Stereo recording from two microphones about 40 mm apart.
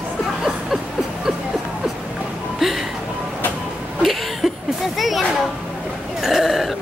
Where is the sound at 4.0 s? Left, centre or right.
Centre.